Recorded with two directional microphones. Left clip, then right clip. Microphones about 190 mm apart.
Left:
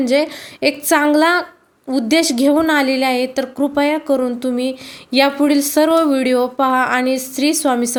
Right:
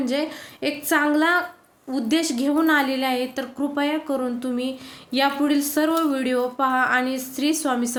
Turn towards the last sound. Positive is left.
turn(degrees=35)  # may be behind; listen again after turning